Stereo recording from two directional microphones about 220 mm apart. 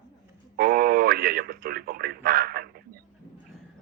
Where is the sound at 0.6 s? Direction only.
40° right (ahead or behind).